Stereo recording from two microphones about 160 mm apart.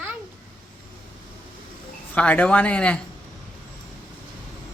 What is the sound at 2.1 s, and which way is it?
Speech, 10° left (ahead or behind).